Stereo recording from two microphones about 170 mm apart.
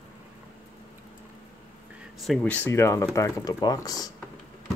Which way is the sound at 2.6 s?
15° left (ahead or behind).